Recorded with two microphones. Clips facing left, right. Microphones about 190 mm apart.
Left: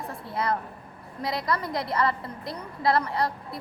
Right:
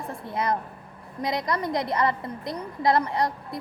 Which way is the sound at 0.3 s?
20° right (ahead or behind).